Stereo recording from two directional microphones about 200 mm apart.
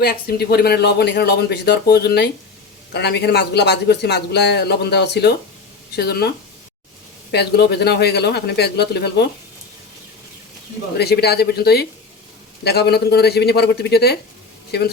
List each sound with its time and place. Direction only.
0.0 s a man's voice: 50° left (ahead or behind)
10.9 s a man's voice: 55° left (ahead or behind)